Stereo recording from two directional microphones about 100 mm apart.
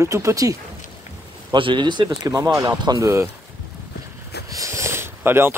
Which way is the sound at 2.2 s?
35° right (ahead or behind).